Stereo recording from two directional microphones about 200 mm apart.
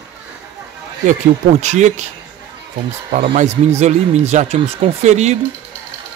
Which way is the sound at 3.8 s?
35° right (ahead or behind).